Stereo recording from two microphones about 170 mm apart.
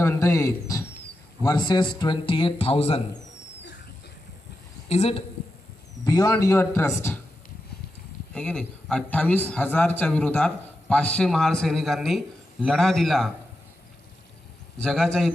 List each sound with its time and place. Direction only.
0.0 s speech: 15° left (ahead or behind); by 3.0 s 35° left (ahead or behind)
4.8 s a woman's voice: 40° left (ahead or behind)
6.0 s speech: 20° left (ahead or behind)
8.4 s a man's voice: 5° left (ahead or behind)
14.8 s a man's voice: 5° left (ahead or behind)